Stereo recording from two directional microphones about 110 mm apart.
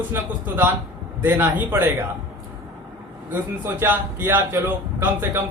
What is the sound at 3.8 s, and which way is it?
A man's voice, 20° right (ahead or behind).